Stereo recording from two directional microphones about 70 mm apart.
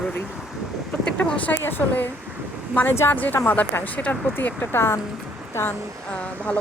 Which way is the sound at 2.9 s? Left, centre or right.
Left.